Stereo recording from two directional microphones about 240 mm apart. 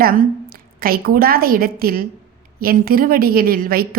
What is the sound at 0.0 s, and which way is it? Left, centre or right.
A woman's voice, right.